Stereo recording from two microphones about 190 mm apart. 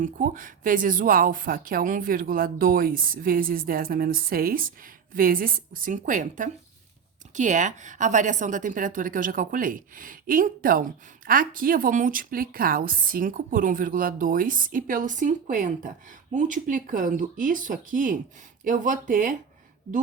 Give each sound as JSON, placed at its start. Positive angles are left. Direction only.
{"t": 0.0, "sound": "speech", "side_deg": -45}